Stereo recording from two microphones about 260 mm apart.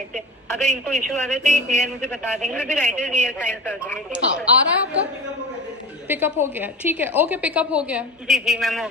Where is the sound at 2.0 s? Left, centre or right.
Centre.